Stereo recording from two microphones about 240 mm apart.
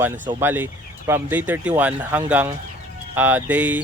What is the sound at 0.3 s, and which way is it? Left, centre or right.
Speech, centre.